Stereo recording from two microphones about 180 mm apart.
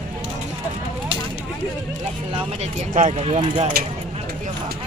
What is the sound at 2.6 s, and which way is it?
Speech, 40° right (ahead or behind).